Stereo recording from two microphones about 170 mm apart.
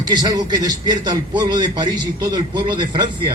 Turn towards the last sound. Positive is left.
turn(degrees=-25)  # may be behind; listen again after turning